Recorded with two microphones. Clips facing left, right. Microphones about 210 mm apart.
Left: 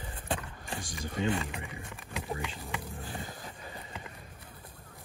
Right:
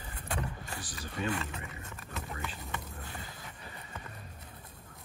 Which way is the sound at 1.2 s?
25° left (ahead or behind).